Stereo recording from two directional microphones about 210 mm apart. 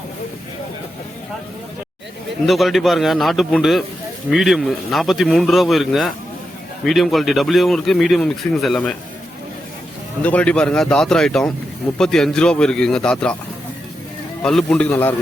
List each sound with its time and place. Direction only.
2.5 s speech: centre (ahead or behind)
10.2 s speech: 5° left (ahead or behind)
14.4 s a man's voice: 5° left (ahead or behind)